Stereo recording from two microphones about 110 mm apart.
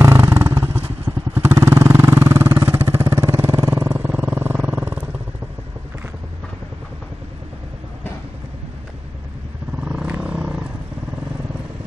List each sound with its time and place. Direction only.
0.0 s vehicle: 20° right (ahead or behind)
9.8 s vehicle: 10° right (ahead or behind)